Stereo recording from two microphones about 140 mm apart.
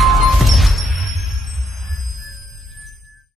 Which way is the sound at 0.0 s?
Centre (ahead or behind).